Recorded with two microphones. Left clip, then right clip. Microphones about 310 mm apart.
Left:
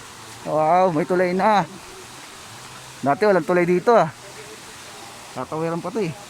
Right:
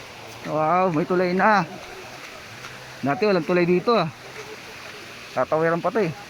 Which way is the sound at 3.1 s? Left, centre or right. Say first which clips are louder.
Left 3 dB; centre.